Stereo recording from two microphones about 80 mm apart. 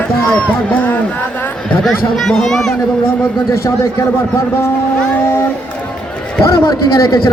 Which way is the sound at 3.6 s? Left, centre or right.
Left.